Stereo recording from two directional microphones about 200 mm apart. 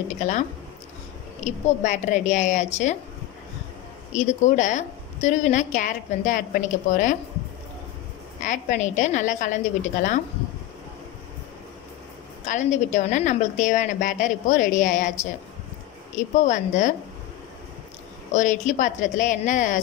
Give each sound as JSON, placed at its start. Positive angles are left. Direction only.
{"t": 0.1, "sound": "a woman's voice", "side_deg": 35}
{"t": 4.1, "sound": "a woman's voice", "side_deg": 35}
{"t": 8.5, "sound": "a woman's voice", "side_deg": 40}
{"t": 12.4, "sound": "a woman's voice", "side_deg": 35}
{"t": 16.2, "sound": "a woman's voice", "side_deg": 35}
{"t": 18.3, "sound": "a woman's voice", "side_deg": 40}